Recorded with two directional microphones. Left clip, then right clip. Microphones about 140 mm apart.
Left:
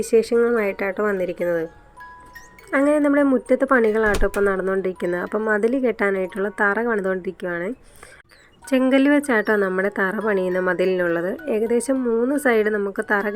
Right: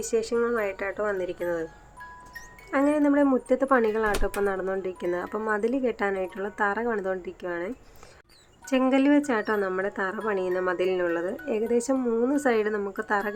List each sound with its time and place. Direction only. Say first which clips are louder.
0.0 s speech: left 8 dB; 35° left (ahead or behind)
2.6 s speech: left 5 dB; 35° left (ahead or behind)
8.7 s a woman's voice: left 5 dB; 35° left (ahead or behind)